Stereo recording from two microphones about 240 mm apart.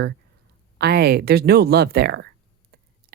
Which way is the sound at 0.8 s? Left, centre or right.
Right.